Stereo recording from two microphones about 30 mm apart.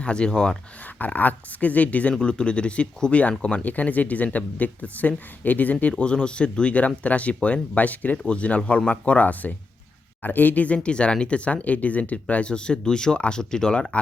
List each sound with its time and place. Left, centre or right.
0.0 s speech: left
0.9 s speech: left
2.2 s speech: left
3.1 s speech: left
3.6 s speech: left
6.0 s speech: left
6.7 s speech: left
8.1 s speech: left
10.2 s speech: left
10.8 s speech: left
11.3 s speech: left
12.5 s speech: left